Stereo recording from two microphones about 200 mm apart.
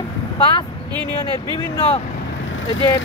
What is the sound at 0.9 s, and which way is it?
Speech, 20° right (ahead or behind).